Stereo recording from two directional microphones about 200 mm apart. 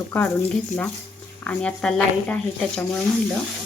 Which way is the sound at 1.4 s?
5° left (ahead or behind).